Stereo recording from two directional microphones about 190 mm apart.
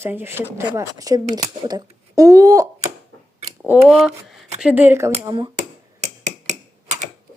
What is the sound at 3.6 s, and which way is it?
Speech, 5° right (ahead or behind).